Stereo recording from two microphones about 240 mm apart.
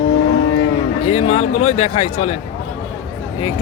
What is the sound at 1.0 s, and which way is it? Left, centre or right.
A man's voice, left.